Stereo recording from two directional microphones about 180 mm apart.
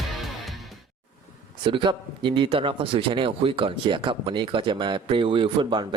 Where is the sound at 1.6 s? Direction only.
25° right (ahead or behind).